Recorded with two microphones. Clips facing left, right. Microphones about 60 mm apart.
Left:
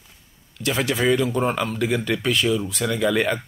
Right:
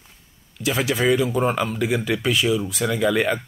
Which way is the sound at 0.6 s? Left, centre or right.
Centre.